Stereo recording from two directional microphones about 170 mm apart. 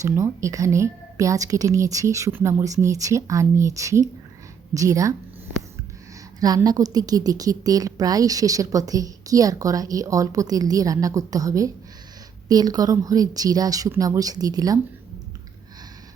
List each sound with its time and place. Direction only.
0.0 s a woman's voice: 20° right (ahead or behind)
6.4 s a woman's voice: 20° right (ahead or behind)